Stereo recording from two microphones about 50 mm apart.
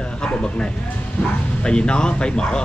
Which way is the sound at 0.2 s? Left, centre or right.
Centre.